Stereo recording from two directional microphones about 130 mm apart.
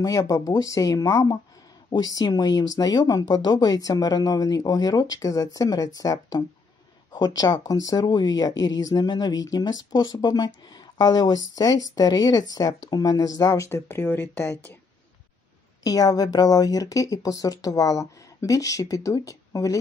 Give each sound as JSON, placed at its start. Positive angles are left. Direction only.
{"t": 0.0, "sound": "speech", "side_deg": 25}
{"t": 15.8, "sound": "speech", "side_deg": 30}